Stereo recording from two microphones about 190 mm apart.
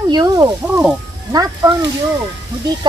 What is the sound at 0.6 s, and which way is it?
Speech, 5° right (ahead or behind).